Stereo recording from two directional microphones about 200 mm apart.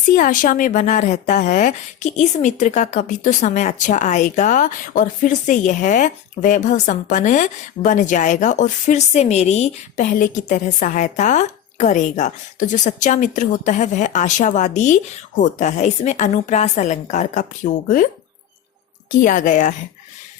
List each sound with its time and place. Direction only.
0.2 s speech: 45° left (ahead or behind)
19.2 s speech: 40° left (ahead or behind)